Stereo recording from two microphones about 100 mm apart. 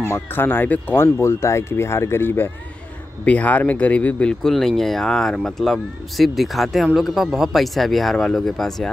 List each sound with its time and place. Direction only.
0.0 s speech: 25° left (ahead or behind); by 8.9 s 5° left (ahead or behind)